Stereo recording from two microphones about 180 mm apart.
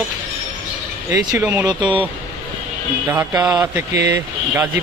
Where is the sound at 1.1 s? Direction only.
15° right (ahead or behind).